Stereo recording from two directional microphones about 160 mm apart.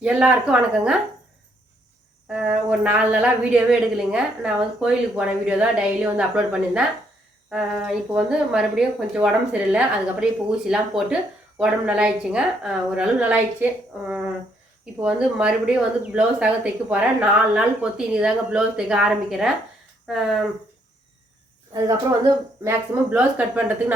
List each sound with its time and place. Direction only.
0.0 s a woman's voice: 10° right (ahead or behind)
2.3 s a woman's voice: 5° right (ahead or behind)
21.7 s a woman's voice: 20° right (ahead or behind)